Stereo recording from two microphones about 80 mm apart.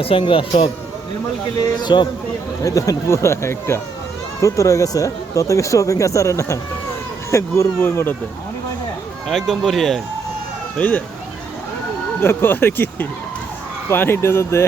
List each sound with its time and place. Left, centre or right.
0.2 s speech: left
1.8 s a man's voice: left
2.6 s speech: left
9.3 s speech: centre
10.8 s speech: left
12.2 s speech: left